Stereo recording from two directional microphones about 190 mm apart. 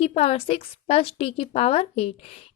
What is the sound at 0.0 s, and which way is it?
A woman's voice, 30° left (ahead or behind).